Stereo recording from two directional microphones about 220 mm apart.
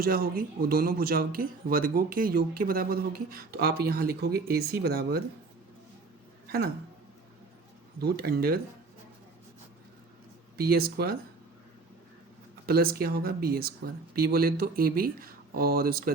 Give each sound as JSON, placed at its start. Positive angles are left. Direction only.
{"t": 0.0, "sound": "speech", "side_deg": -45}
{"t": 8.0, "sound": "speech", "side_deg": -45}
{"t": 10.6, "sound": "speech", "side_deg": -45}
{"t": 12.6, "sound": "speech", "side_deg": -45}